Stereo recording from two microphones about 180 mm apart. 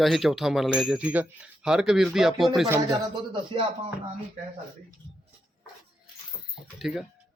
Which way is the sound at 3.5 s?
30° right (ahead or behind).